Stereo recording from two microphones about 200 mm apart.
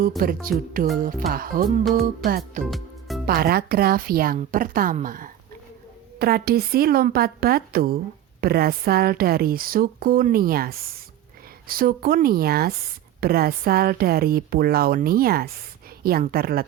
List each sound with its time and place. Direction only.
0.2 s speech: 45° right (ahead or behind)
1.8 s music: centre (ahead or behind)
3.2 s speech: 50° right (ahead or behind)